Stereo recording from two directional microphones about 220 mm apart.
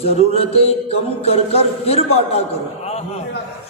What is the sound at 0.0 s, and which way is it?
Speech, 25° left (ahead or behind).